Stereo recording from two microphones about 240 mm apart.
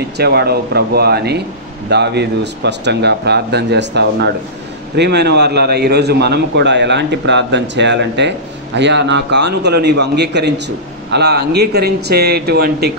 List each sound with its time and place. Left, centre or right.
0.2 s a man's voice: right